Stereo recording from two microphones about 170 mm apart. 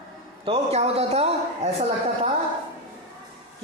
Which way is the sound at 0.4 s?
35° right (ahead or behind).